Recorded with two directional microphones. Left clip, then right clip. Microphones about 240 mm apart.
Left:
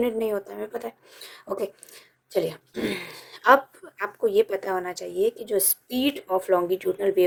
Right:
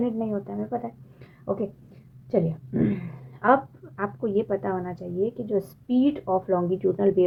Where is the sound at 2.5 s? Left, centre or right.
Left.